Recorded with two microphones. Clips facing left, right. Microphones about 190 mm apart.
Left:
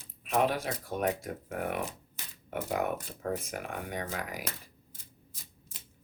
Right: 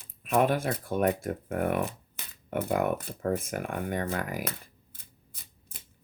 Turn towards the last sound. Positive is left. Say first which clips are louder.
# left 2 dB
turn(degrees=-60)  # may be behind; listen again after turning